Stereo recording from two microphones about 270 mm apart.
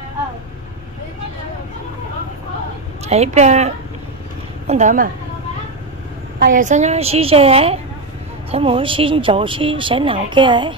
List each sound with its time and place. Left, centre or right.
3.1 s speech: right
6.4 s speech: right